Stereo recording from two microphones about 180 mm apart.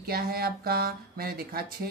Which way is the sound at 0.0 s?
60° right (ahead or behind).